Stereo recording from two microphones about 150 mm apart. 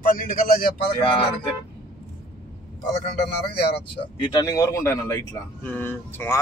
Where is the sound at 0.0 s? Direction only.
70° left (ahead or behind).